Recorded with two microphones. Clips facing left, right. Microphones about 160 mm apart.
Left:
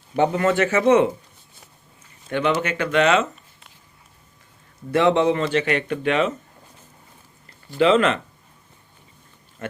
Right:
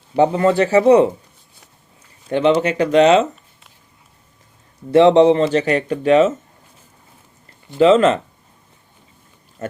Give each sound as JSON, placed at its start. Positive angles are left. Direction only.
{"t": 0.1, "sound": "speech", "side_deg": -30}
{"t": 2.3, "sound": "speech", "side_deg": -30}
{"t": 4.9, "sound": "speech", "side_deg": -30}
{"t": 7.8, "sound": "speech", "side_deg": -35}